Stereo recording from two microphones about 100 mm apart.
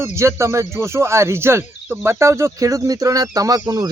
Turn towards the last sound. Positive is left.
turn(degrees=-35)  # may be behind; listen again after turning